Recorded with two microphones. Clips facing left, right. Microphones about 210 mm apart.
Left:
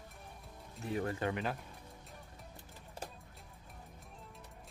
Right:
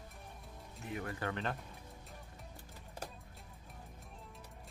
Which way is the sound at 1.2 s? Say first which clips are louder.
Left 3 dB; 10° left (ahead or behind).